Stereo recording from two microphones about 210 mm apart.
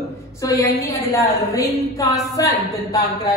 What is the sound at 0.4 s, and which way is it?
Speech, 15° left (ahead or behind).